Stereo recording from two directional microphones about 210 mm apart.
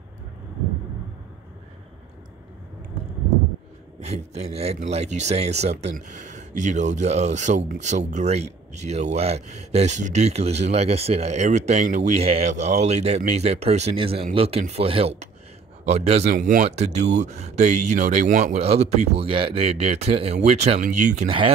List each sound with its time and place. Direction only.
4.0 s speech: 30° right (ahead or behind)